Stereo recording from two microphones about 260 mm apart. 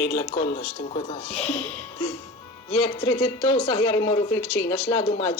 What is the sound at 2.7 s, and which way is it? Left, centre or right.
A woman's voice, left.